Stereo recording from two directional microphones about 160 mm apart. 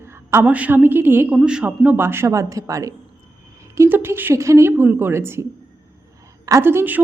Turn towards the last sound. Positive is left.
turn(degrees=-15)  # may be behind; listen again after turning